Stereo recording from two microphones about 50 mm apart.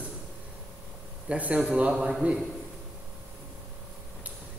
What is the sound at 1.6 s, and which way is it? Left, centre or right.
Speech, right.